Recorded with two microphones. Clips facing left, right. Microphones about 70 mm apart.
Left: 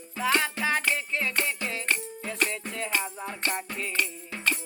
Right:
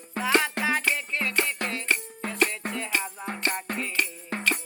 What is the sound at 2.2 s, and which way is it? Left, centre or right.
Music, right.